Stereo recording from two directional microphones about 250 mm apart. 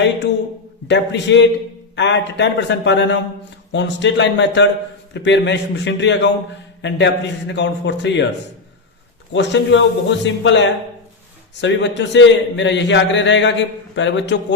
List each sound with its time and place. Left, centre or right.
0.9 s a man's voice: left
9.3 s a man's voice: left